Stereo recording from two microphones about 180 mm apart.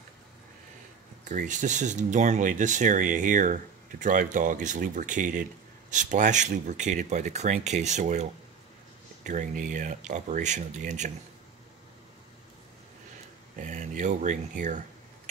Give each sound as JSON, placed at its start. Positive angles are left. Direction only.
{"t": 1.3, "sound": "speech", "side_deg": -45}
{"t": 13.6, "sound": "speech", "side_deg": -45}